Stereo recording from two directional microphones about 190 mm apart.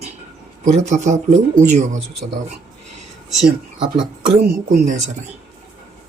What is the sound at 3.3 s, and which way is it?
Speech, centre (ahead or behind).